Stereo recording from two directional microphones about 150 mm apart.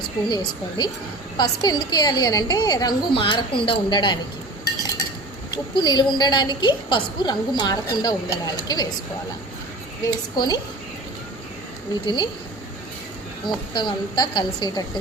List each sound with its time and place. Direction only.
0.3 s a woman's voice: 30° left (ahead or behind)
5.7 s a woman's voice: 30° left (ahead or behind)
10.1 s a woman's voice: 25° left (ahead or behind)
12.0 s a woman's voice: 30° left (ahead or behind)
13.7 s a woman's voice: 30° left (ahead or behind)